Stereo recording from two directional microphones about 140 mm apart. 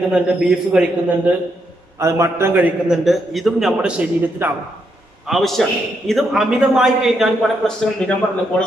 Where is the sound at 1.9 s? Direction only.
20° right (ahead or behind).